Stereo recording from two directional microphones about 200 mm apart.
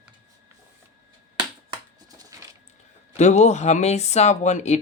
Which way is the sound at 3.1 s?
35° left (ahead or behind).